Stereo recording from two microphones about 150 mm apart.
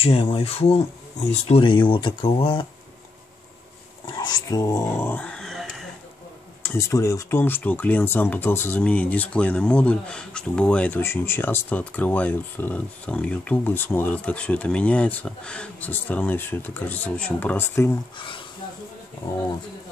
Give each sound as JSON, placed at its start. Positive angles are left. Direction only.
{"t": 0.0, "sound": "speech", "side_deg": 40}
{"t": 4.2, "sound": "dog", "side_deg": 25}
{"t": 6.6, "sound": "speech", "side_deg": 15}
{"t": 18.1, "sound": "speech", "side_deg": 35}